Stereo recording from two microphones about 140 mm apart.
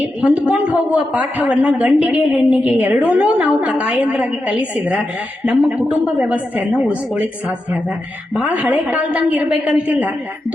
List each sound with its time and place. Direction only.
0.2 s a woman's voice: 10° right (ahead or behind)
8.4 s a woman's voice: 10° right (ahead or behind)